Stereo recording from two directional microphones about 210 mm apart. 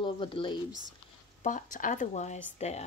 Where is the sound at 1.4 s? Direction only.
40° left (ahead or behind).